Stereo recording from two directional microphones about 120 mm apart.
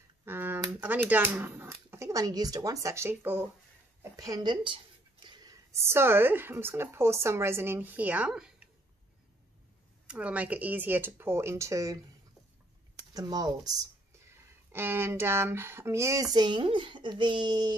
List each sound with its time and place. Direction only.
0.2 s a sound: 15° right (ahead or behind)
0.7 s speech: 15° right (ahead or behind)
4.0 s a sound: 30° right (ahead or behind)
5.9 s speech: 20° right (ahead or behind)
10.0 s speech: 10° right (ahead or behind); by 12.0 s 25° right (ahead or behind)
13.1 s speech: 35° right (ahead or behind)
14.2 s speech: 20° right (ahead or behind); by 17.7 s 35° right (ahead or behind)